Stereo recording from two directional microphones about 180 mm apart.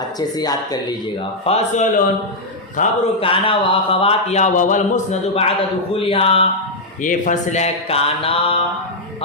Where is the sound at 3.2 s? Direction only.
30° left (ahead or behind).